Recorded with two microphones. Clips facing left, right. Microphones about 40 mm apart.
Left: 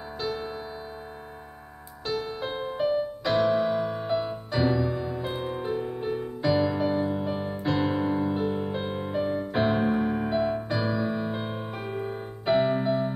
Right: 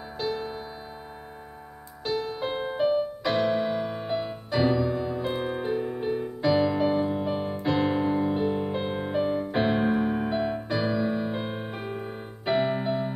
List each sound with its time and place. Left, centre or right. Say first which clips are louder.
2.0 s music: right 2 dB; centre
7.6 s piano: right 1 dB; centre
8.4 s music: right 2 dB; centre
11.5 s music: even; centre
11.8 s music: left 2 dB; centre